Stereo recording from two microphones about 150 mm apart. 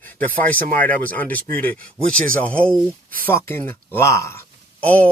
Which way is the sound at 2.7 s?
5° right (ahead or behind).